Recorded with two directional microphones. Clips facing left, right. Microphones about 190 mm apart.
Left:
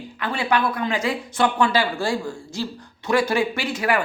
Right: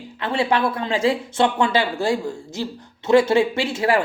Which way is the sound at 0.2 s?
25° right (ahead or behind).